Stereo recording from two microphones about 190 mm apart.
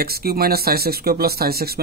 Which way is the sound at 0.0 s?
55° right (ahead or behind).